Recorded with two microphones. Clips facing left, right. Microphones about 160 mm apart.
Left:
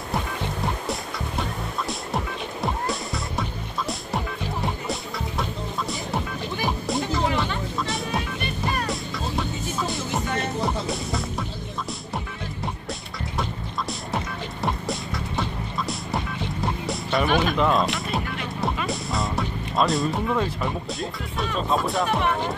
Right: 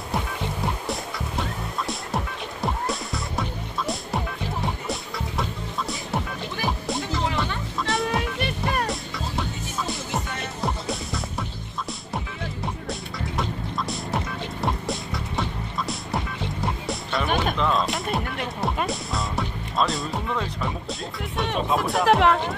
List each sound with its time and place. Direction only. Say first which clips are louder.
1.9 s music: left 1 dB; centre (ahead or behind)
10.6 s music: left 2 dB; centre (ahead or behind)
13.4 s music: even; centre (ahead or behind)
16.6 s music: left 1 dB; centre (ahead or behind)
22.0 s music: right 5 dB; 90° right